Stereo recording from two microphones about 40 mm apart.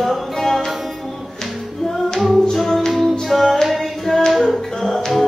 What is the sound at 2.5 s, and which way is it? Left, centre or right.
Music, centre.